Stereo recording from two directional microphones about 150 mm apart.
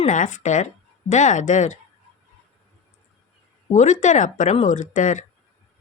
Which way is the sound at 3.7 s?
55° left (ahead or behind).